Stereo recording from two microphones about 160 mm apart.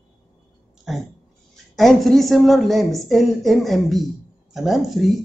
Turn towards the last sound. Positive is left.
turn(degrees=0)  # may be behind; listen again after turning